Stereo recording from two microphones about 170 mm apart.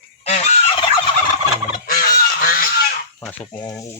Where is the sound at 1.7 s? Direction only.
60° left (ahead or behind).